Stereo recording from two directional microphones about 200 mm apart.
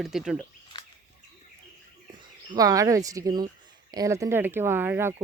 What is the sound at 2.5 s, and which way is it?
Speech, 15° right (ahead or behind).